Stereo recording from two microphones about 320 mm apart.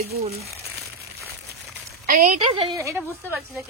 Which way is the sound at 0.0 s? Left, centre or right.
Right.